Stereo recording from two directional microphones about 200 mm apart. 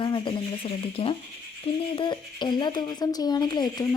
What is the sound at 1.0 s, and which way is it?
A woman's voice, 30° left (ahead or behind).